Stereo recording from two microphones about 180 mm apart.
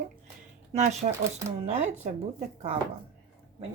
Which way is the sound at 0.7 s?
40° right (ahead or behind).